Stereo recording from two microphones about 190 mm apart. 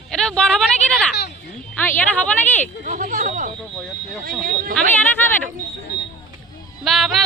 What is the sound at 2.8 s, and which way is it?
Speech, 40° right (ahead or behind).